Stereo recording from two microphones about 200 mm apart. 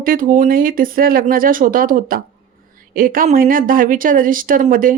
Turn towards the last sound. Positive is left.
turn(degrees=-45)  # may be behind; listen again after turning